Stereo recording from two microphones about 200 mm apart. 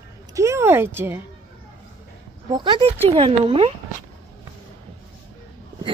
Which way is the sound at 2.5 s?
20° right (ahead or behind).